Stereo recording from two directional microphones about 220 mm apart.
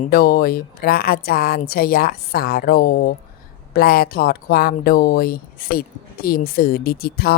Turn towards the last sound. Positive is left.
turn(degrees=45)  # may be behind; listen again after turning